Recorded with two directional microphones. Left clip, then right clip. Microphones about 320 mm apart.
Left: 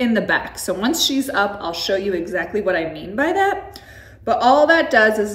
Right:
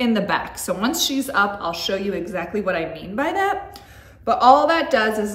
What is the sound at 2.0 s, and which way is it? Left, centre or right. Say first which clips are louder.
Speech: left 4 dB; right.